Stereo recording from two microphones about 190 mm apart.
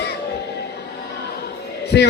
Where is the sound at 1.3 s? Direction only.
60° left (ahead or behind).